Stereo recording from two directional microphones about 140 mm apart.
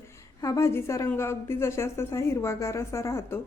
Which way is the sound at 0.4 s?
20° left (ahead or behind).